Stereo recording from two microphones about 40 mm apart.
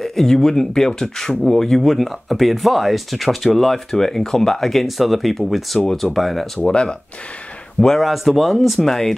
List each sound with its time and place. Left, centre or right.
0.0 s speech: centre
6.6 s speech: left
8.0 s speech: centre